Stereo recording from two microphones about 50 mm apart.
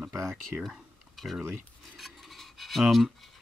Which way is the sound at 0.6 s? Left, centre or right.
Centre.